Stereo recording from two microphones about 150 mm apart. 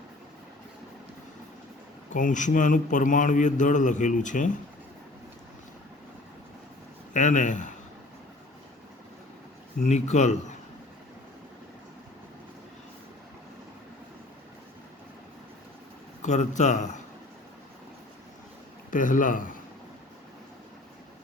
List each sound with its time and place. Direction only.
2.1 s a man's voice: 60° left (ahead or behind)
7.1 s a man's voice: 55° left (ahead or behind)
9.8 s a man's voice: 50° left (ahead or behind)
16.2 s a man's voice: 50° left (ahead or behind)
18.9 s a man's voice: 60° left (ahead or behind)